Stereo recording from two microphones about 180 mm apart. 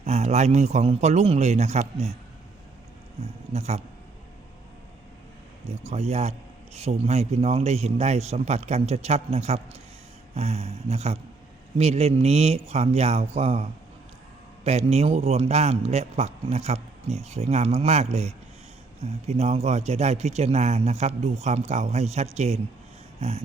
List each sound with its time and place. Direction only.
0.0 s a man's voice: 35° right (ahead or behind)
3.2 s speech: 35° right (ahead or behind)
5.8 s a man's voice: 35° right (ahead or behind)